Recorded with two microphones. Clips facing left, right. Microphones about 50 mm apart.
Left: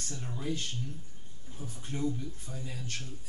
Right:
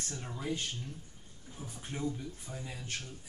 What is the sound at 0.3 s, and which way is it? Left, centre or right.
Speech, centre.